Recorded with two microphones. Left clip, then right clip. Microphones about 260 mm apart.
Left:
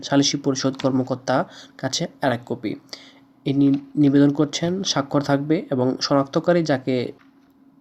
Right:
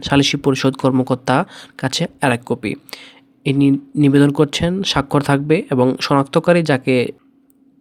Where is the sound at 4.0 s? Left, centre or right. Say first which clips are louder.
Right 4 dB; right.